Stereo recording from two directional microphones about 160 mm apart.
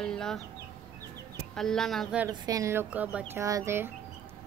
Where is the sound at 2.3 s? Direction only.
20° right (ahead or behind).